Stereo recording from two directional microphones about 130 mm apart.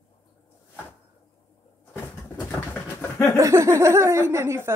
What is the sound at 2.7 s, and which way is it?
Pigeon, 20° left (ahead or behind).